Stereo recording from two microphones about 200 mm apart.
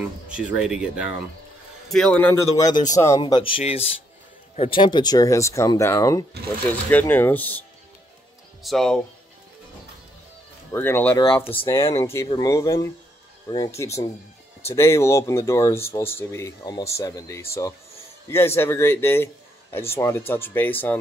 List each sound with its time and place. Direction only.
0.0 s speech: 5° right (ahead or behind)
8.6 s speech: centre (ahead or behind)
10.7 s speech: 10° left (ahead or behind)
11.2 s speech: 25° left (ahead or behind)
11.9 s speech: 15° left (ahead or behind)